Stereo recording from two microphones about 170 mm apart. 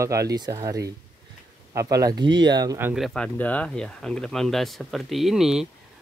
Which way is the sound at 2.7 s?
10° right (ahead or behind).